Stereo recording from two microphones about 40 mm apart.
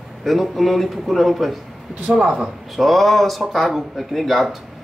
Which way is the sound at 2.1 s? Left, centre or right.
Centre.